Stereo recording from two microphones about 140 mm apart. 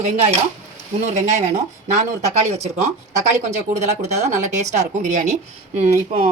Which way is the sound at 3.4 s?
55° right (ahead or behind).